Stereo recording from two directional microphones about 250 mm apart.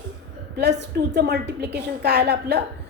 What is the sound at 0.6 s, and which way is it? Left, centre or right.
A woman's voice, right.